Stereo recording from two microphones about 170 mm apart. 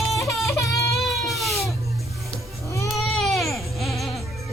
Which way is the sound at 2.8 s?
Centre (ahead or behind).